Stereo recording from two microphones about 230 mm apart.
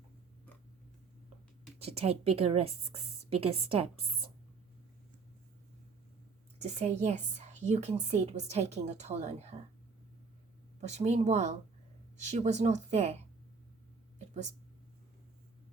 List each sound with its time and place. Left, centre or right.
1.8 s a woman's voice: right
6.6 s a woman's voice: right
10.8 s a woman's voice: right